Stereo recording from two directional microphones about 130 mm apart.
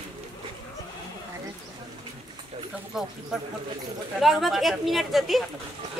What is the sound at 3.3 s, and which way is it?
Speech, 5° right (ahead or behind).